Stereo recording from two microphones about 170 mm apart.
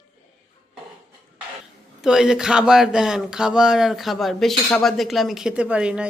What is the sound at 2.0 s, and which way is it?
A woman's voice, 5° right (ahead or behind).